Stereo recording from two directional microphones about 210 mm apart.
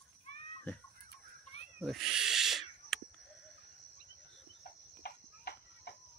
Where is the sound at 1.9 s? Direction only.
Centre (ahead or behind).